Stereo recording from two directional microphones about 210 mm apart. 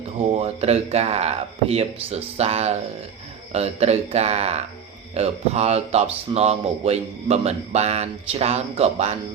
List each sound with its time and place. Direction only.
0.3 s a man's voice: 30° right (ahead or behind)